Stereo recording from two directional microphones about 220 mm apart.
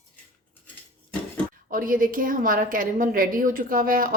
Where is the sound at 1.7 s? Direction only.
40° right (ahead or behind).